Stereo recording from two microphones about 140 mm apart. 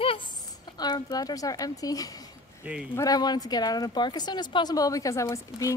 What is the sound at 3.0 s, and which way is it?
Speech, 30° left (ahead or behind).